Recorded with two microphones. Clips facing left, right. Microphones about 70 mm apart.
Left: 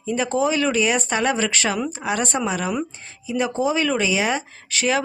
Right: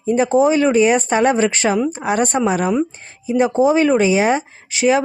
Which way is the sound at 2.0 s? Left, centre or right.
Right.